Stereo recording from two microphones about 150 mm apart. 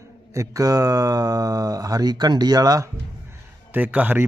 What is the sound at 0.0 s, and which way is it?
Speech, 20° right (ahead or behind).